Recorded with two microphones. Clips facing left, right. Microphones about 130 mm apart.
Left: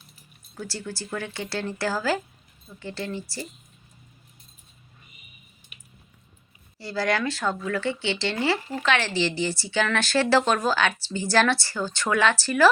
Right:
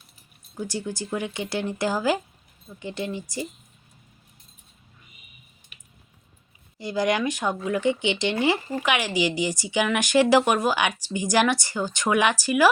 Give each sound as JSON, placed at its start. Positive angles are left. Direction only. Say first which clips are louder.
{"t": 0.5, "sound": "speech", "louder": "right 4 dB", "side_deg": -15}
{"t": 6.7, "sound": "speech", "louder": "right 2 dB", "side_deg": -15}